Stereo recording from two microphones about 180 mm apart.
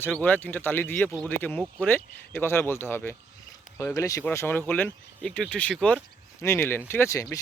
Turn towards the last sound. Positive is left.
turn(degrees=15)  # may be behind; listen again after turning